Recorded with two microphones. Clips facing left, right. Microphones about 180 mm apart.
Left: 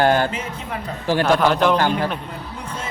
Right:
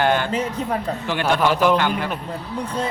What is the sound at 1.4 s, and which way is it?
Speech, 5° right (ahead or behind).